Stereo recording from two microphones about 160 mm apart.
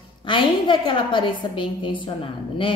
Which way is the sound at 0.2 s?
30° left (ahead or behind).